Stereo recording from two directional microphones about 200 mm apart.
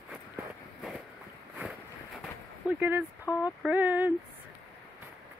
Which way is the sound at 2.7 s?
10° right (ahead or behind).